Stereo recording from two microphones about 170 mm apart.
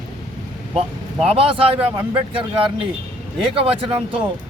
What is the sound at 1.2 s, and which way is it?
Speech, 35° right (ahead or behind).